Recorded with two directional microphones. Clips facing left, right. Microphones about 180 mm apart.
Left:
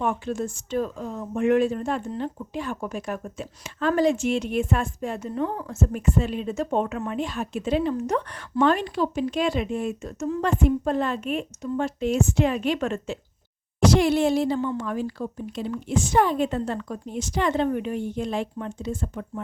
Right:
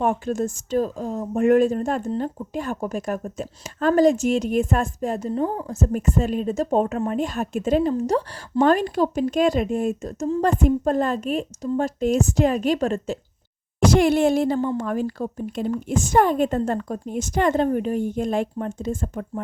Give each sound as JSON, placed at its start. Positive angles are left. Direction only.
{"t": 0.0, "sound": "speech", "side_deg": -40}
{"t": 13.7, "sound": "speech", "side_deg": -50}